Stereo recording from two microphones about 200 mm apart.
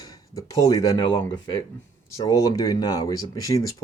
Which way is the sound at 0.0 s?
20° left (ahead or behind).